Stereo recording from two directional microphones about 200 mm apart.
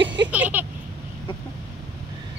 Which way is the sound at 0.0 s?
65° right (ahead or behind).